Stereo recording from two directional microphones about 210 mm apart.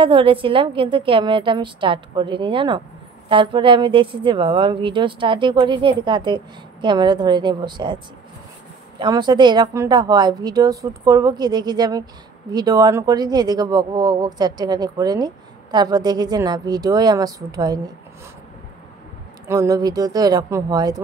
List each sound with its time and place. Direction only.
0.0 s speech: 25° right (ahead or behind)
9.0 s speech: 20° right (ahead or behind)
19.4 s speech: 15° right (ahead or behind)